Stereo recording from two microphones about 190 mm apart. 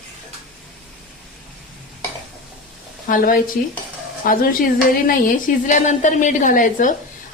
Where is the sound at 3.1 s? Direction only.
45° left (ahead or behind).